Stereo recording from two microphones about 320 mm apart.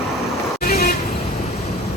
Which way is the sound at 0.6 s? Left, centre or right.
Left.